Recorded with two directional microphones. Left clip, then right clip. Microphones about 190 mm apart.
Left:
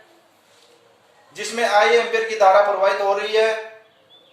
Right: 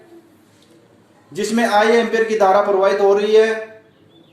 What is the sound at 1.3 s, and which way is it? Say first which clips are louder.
A man's voice: right 2 dB; 35° right (ahead or behind).